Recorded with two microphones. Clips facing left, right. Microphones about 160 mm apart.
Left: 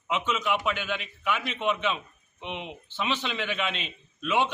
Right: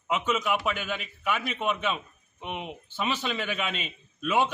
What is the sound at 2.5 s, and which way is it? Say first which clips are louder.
A man's voice: right 1 dB; 5° right (ahead or behind).